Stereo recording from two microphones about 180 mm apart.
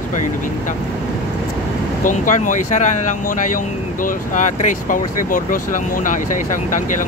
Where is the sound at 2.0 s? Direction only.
45° left (ahead or behind).